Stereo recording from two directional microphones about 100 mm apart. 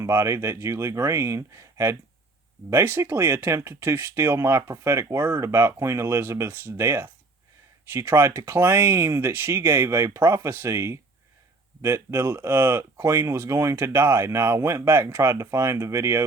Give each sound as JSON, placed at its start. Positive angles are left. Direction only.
{"t": 0.0, "sound": "speech", "side_deg": -25}